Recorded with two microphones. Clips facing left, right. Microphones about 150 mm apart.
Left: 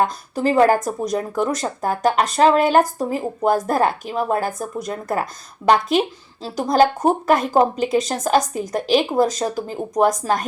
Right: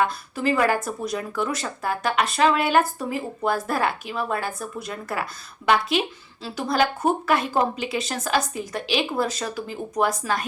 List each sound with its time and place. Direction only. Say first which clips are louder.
0.0 s speech: left 4 dB; 40° left (ahead or behind)